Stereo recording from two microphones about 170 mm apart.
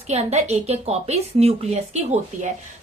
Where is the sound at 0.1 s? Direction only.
40° right (ahead or behind).